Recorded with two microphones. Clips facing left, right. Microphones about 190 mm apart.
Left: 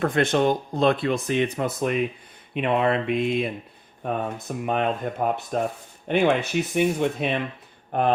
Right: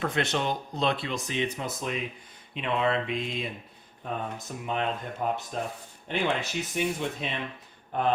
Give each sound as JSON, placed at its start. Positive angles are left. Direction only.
{"t": 0.0, "sound": "speech", "side_deg": 50}